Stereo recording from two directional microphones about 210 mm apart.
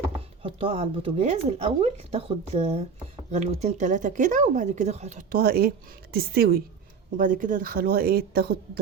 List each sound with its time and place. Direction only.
0.4 s speech: 25° right (ahead or behind); by 8.8 s 45° right (ahead or behind)